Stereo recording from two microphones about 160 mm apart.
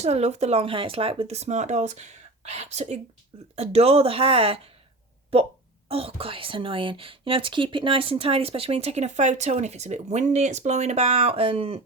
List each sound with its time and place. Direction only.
0.0 s speech: 40° right (ahead or behind)